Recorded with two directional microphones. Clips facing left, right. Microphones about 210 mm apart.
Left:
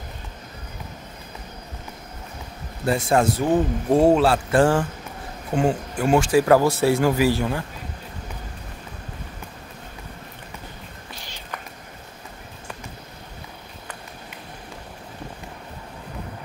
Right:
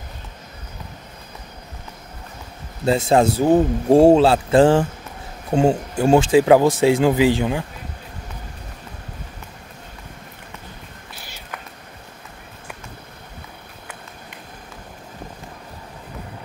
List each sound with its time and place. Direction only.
2.8 s speech: 25° right (ahead or behind)
11.1 s cat: 5° right (ahead or behind)